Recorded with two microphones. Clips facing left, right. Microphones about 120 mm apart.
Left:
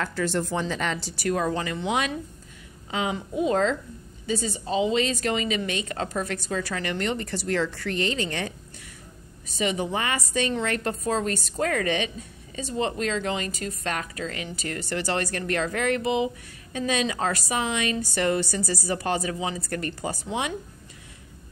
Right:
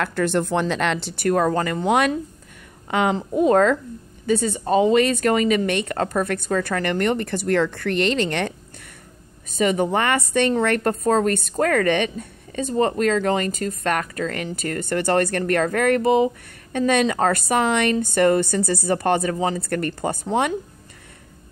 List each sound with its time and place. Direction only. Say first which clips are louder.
0.0 s speech: right 5 dB; 60° right (ahead or behind)
2.9 s speech: right 7 dB; 65° right (ahead or behind)
3.3 s a woman's voice: right 7 dB; 50° right (ahead or behind); by 8.5 s 70° right (ahead or behind)
9.6 s a woman's voice: right 7 dB; 45° right (ahead or behind)
16.7 s speech: right 7 dB; 55° right (ahead or behind)
19.6 s a woman's voice: right 6 dB; 55° right (ahead or behind)